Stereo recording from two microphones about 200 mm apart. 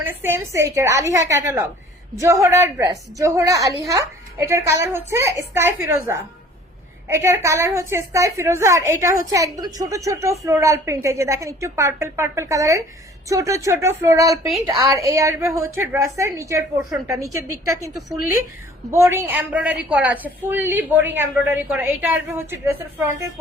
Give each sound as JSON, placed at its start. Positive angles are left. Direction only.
{"t": 0.0, "sound": "a woman's voice", "side_deg": -10}
{"t": 7.1, "sound": "a woman's voice", "side_deg": -15}
{"t": 18.9, "sound": "a woman's voice", "side_deg": -15}